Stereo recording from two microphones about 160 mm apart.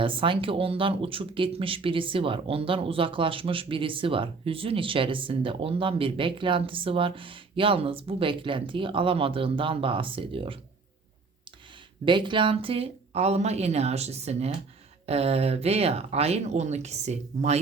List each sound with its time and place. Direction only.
0.0 s speech: 30° right (ahead or behind)
12.0 s speech: 30° right (ahead or behind)